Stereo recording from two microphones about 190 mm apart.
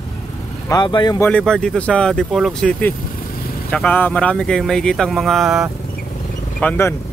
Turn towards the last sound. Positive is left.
turn(degrees=10)  # may be behind; listen again after turning